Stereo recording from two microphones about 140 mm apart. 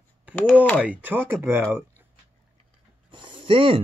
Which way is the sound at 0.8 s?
10° right (ahead or behind).